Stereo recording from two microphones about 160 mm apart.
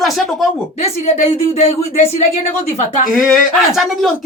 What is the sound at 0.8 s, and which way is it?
A woman's voice, 45° left (ahead or behind).